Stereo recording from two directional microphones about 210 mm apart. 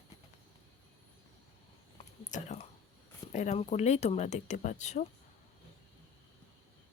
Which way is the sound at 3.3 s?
35° left (ahead or behind).